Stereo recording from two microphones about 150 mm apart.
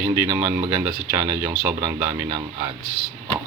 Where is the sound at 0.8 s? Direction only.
10° right (ahead or behind).